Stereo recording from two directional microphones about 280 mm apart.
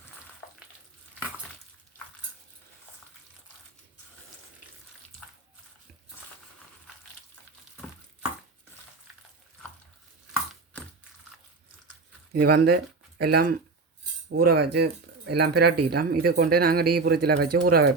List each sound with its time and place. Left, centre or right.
12.3 s speech: right